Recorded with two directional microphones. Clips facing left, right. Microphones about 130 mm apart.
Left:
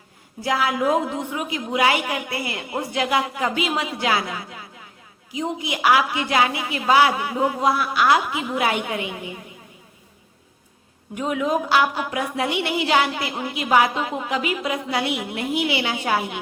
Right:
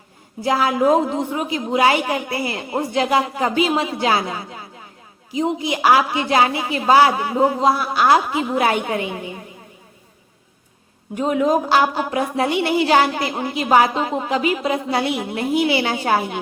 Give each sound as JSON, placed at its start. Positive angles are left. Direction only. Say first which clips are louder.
{"t": 0.4, "sound": "a woman's voice", "louder": "right 4 dB", "side_deg": -30}
{"t": 11.1, "sound": "a woman's voice", "louder": "right 5 dB", "side_deg": -35}